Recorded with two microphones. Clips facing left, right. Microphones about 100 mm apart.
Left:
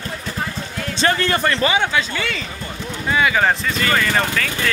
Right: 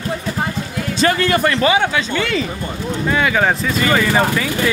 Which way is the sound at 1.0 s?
30° left (ahead or behind).